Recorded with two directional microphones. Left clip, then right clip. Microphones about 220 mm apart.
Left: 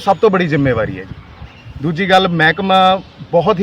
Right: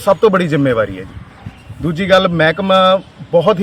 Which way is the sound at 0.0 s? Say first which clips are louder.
Right 1 dB; centre (ahead or behind).